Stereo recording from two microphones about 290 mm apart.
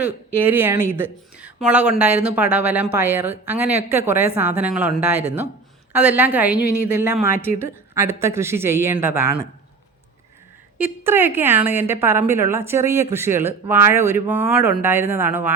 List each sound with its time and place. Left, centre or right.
0.4 s a woman's voice: centre
10.8 s a woman's voice: centre